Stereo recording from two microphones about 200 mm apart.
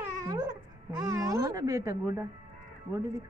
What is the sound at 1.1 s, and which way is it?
Speech, 15° right (ahead or behind).